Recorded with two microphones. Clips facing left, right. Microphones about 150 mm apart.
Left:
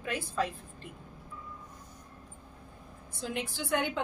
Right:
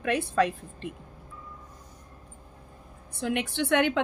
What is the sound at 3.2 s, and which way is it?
Speech, 65° right (ahead or behind).